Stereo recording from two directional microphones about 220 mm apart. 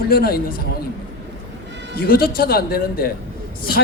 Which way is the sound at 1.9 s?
45° left (ahead or behind).